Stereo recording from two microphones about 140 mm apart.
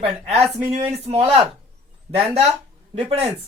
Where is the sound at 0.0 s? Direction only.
45° right (ahead or behind).